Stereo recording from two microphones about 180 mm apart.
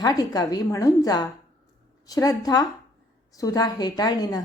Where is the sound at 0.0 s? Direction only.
20° left (ahead or behind).